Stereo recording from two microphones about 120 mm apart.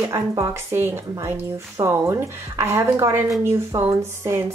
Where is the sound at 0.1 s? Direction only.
25° right (ahead or behind).